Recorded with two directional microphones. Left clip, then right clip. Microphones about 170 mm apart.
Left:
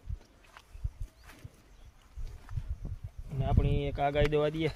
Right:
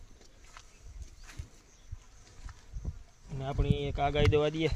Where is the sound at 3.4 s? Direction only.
25° right (ahead or behind).